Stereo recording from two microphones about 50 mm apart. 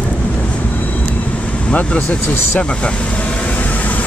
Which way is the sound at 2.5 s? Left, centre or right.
Left.